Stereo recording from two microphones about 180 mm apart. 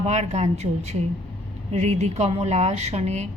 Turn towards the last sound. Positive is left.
turn(degrees=-40)  # may be behind; listen again after turning